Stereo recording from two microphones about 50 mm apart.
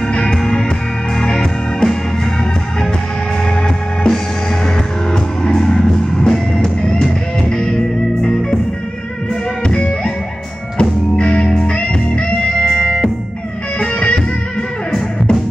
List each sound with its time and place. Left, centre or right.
0.1 s music: centre
3.6 s music: centre
9.7 s music: left
13.7 s music: left